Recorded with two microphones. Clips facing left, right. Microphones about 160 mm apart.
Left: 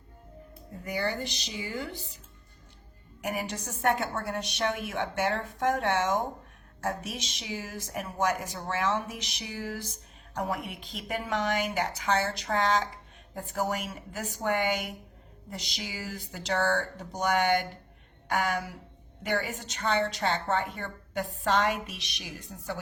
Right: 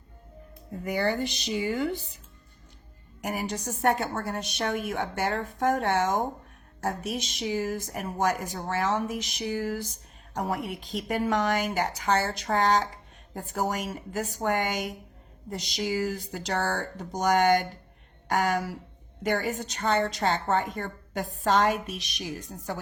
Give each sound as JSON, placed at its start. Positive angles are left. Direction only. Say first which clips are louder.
{"t": 1.5, "sound": "a woman's voice", "louder": "right 8 dB", "side_deg": -55}
{"t": 3.2, "sound": "a woman's voice", "louder": "right 2 dB", "side_deg": -35}